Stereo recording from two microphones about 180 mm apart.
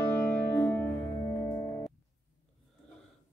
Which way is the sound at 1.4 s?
20° left (ahead or behind).